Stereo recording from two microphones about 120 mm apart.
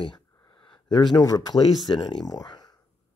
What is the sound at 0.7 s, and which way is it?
Speech, 35° left (ahead or behind).